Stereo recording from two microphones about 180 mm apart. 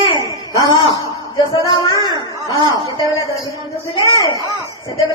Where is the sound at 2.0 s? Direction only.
20° left (ahead or behind).